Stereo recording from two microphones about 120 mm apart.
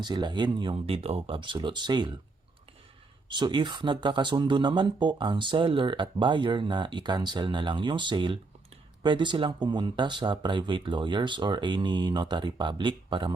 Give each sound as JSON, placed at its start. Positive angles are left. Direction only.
{"t": 0.0, "sound": "speech", "side_deg": -35}
{"t": 3.2, "sound": "speech", "side_deg": -40}